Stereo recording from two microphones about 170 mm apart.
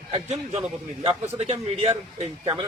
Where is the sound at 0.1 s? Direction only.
35° right (ahead or behind).